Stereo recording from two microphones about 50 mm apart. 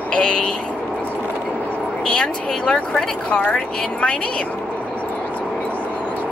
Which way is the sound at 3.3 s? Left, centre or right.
Left.